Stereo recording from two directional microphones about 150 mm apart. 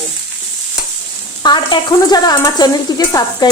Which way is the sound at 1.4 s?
30° left (ahead or behind).